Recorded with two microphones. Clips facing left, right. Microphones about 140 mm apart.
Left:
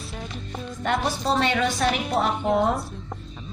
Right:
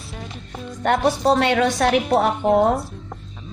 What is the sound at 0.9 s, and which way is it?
A woman's voice, 60° right (ahead or behind).